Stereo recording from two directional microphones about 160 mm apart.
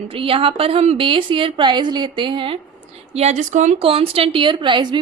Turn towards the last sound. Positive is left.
turn(degrees=-30)  # may be behind; listen again after turning